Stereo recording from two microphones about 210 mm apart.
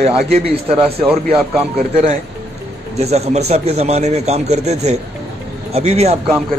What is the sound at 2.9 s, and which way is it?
Speech, 30° right (ahead or behind).